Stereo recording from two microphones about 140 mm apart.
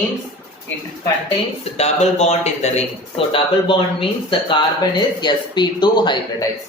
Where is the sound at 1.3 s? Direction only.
50° left (ahead or behind); by 6.5 s 30° left (ahead or behind).